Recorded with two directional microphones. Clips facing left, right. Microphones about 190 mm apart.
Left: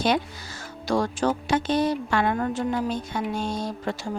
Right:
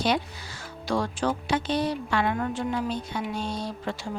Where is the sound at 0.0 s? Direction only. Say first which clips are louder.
Left 2 dB; 45° left (ahead or behind).